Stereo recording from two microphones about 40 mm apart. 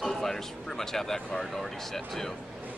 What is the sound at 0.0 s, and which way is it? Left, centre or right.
Speech, centre.